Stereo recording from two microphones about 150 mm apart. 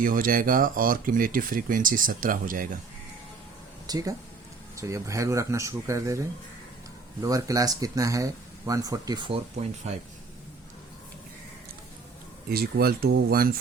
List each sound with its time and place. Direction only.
0.0 s speech: 70° right (ahead or behind)
3.8 s speech: 25° right (ahead or behind)
9.8 s speech: 45° right (ahead or behind)
12.5 s speech: 90° right